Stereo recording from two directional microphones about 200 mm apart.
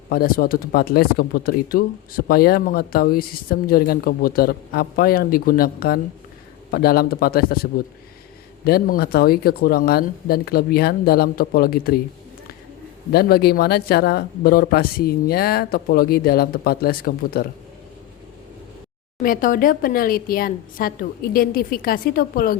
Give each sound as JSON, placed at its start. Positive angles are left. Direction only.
{"t": 0.1, "sound": "speech", "side_deg": 45}
{"t": 13.1, "sound": "speech", "side_deg": 50}
{"t": 19.2, "sound": "speech", "side_deg": 45}